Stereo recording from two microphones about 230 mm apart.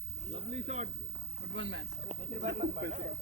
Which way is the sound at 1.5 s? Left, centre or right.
Right.